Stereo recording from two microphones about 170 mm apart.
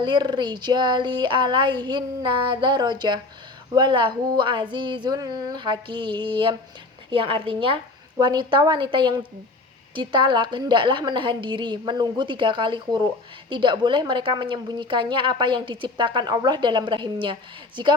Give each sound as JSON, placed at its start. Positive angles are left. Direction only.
{"t": 0.0, "sound": "a woman's voice", "side_deg": -25}